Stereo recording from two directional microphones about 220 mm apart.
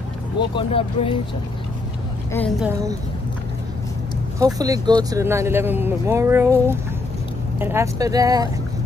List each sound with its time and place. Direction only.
0.6 s speech: 25° left (ahead or behind)
2.6 s speech: 15° right (ahead or behind)
4.4 s speech: 15° right (ahead or behind)